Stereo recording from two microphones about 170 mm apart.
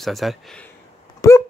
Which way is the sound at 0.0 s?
Centre (ahead or behind).